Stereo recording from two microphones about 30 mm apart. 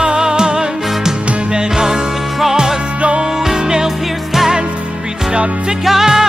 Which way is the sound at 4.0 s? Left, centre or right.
Centre.